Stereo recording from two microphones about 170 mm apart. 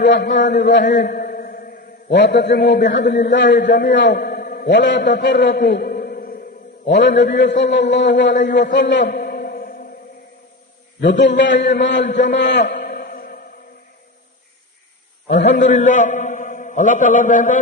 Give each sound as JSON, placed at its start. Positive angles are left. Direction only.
{"t": 0.0, "sound": "a man's voice", "side_deg": 90}
{"t": 1.1, "sound": "a sound", "side_deg": 55}
{"t": 2.1, "sound": "a man's voice", "side_deg": 90}
{"t": 6.9, "sound": "a man's voice", "side_deg": 90}
{"t": 8.7, "sound": "a sound", "side_deg": 90}
{"t": 11.0, "sound": "a man's voice", "side_deg": 90}
{"t": 12.2, "sound": "music", "side_deg": 90}
{"t": 15.3, "sound": "a man's voice", "side_deg": 90}
{"t": 15.5, "sound": "a man's voice", "side_deg": 50}